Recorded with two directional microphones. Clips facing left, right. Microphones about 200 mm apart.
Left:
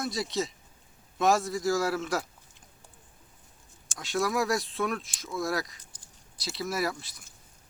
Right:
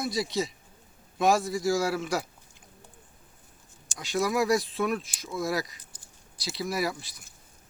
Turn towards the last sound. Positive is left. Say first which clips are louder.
# right 1 dB
turn(degrees=0)  # may be behind; listen again after turning